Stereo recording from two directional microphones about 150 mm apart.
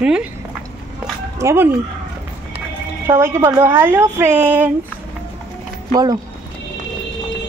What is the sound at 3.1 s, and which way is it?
A woman's voice, 20° right (ahead or behind).